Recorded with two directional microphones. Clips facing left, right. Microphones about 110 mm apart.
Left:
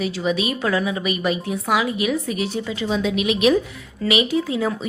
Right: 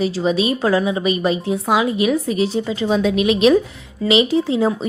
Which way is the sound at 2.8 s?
45° right (ahead or behind).